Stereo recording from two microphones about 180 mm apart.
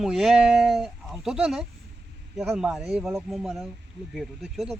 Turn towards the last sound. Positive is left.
turn(degrees=0)  # may be behind; listen again after turning